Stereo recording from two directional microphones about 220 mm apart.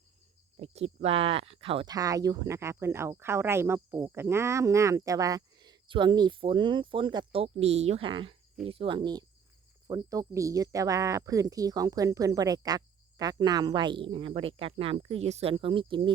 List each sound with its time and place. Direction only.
0.5 s speech: 25° right (ahead or behind)